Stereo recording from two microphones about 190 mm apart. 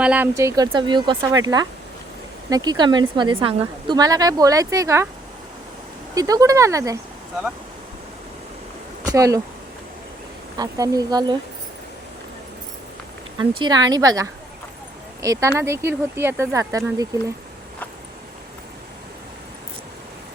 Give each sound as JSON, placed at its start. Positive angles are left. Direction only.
{"t": 0.0, "sound": "a woman's voice", "side_deg": -10}
{"t": 6.1, "sound": "speech", "side_deg": -20}
{"t": 9.0, "sound": "speech", "side_deg": -20}
{"t": 10.6, "sound": "a woman's voice", "side_deg": -20}
{"t": 13.6, "sound": "a woman's voice", "side_deg": -20}